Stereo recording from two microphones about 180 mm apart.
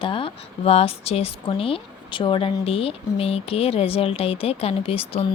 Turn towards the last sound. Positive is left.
turn(degrees=30)  # may be behind; listen again after turning